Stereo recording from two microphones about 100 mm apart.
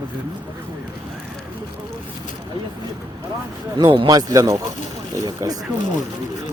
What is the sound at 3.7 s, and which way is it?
Speech, 55° right (ahead or behind).